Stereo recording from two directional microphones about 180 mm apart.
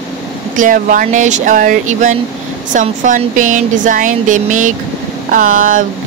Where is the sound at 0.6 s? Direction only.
45° right (ahead or behind).